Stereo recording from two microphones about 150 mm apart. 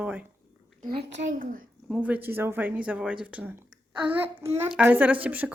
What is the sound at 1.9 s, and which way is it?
Speech, 10° right (ahead or behind).